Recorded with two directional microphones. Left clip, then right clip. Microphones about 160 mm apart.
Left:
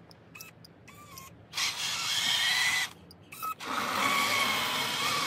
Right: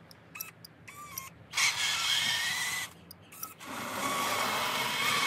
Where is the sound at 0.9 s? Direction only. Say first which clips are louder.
Right 5 dB; 15° right (ahead or behind); by 2.6 s centre (ahead or behind).